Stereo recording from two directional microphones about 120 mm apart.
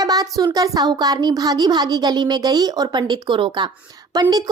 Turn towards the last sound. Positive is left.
turn(degrees=-30)  # may be behind; listen again after turning